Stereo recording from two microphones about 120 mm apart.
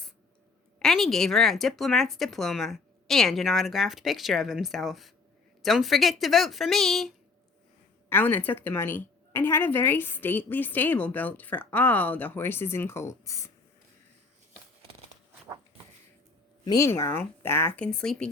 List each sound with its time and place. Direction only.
0.8 s speech: 5° left (ahead or behind)
8.1 s a woman's voice: 15° left (ahead or behind)
16.7 s a woman's voice: 25° left (ahead or behind); by 18.3 s 5° left (ahead or behind)